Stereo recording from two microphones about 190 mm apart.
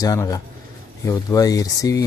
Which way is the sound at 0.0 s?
20° left (ahead or behind).